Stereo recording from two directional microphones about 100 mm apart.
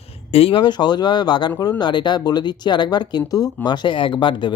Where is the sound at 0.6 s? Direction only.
45° left (ahead or behind).